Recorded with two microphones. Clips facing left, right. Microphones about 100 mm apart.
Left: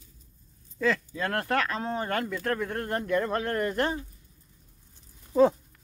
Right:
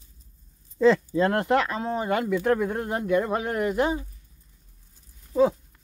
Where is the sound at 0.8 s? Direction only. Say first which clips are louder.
Right 8 dB; 25° right (ahead or behind).